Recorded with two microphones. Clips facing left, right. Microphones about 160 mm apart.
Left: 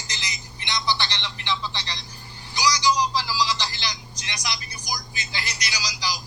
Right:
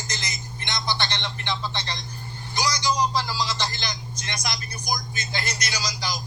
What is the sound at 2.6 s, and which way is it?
Vehicle, 50° right (ahead or behind).